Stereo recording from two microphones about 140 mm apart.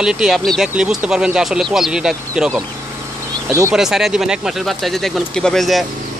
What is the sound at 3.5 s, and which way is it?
Speech, 20° right (ahead or behind).